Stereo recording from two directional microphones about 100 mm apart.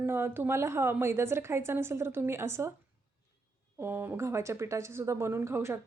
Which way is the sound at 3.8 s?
20° right (ahead or behind).